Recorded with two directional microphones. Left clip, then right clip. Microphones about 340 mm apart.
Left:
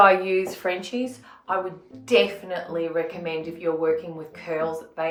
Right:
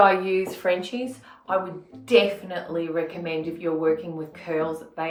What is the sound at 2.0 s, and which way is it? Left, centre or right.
Speech, centre.